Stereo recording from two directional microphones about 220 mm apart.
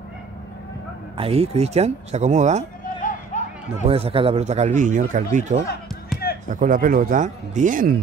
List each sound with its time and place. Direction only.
1.1 s speech: 25° right (ahead or behind)
2.8 s a sound: 35° left (ahead or behind)
3.8 s speech: 25° right (ahead or behind)